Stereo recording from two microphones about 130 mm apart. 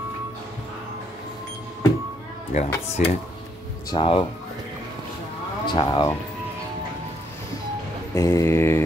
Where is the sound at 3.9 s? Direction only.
45° left (ahead or behind).